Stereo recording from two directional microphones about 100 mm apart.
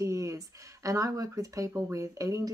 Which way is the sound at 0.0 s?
30° right (ahead or behind).